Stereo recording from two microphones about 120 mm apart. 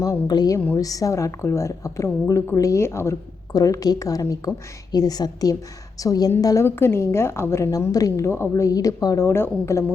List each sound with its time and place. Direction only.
0.0 s a woman's voice: 30° left (ahead or behind)